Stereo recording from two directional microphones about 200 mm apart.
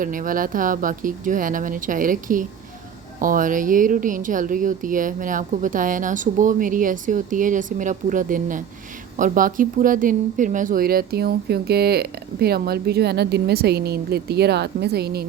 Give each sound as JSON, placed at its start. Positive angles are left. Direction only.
{"t": 0.0, "sound": "speech", "side_deg": -45}